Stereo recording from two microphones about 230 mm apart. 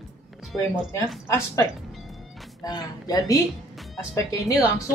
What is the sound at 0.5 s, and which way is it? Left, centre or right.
Speech, centre.